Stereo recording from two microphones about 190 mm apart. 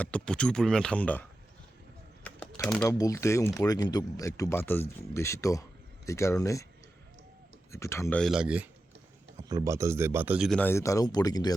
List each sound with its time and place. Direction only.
0.0 s speech: 5° left (ahead or behind)
2.2 s a sound: 5° left (ahead or behind)
3.0 s speech: 15° left (ahead or behind)
7.7 s speech: 15° left (ahead or behind)
8.2 s speech: 5° right (ahead or behind)
9.4 s speech: 20° right (ahead or behind); by 10.6 s 5° right (ahead or behind)
10.6 s speech: 15° left (ahead or behind)